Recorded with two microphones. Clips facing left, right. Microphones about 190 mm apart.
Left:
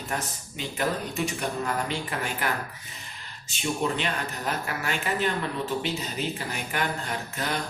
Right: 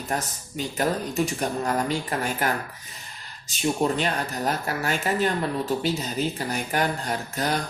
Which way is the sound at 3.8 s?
40° right (ahead or behind).